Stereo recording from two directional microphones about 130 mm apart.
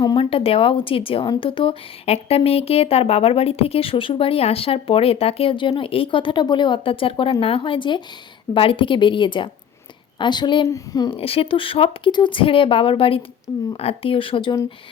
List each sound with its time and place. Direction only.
0.0 s a sound: 35° left (ahead or behind)
0.3 s a woman's voice: 45° left (ahead or behind); by 11.1 s 30° left (ahead or behind)
11.2 s speech: 45° left (ahead or behind)